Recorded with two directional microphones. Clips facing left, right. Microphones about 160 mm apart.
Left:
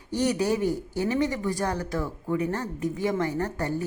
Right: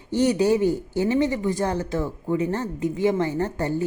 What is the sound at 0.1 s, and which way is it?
Speech, 25° right (ahead or behind).